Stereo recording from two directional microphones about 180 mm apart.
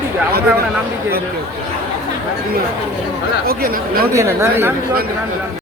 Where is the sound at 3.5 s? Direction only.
55° right (ahead or behind).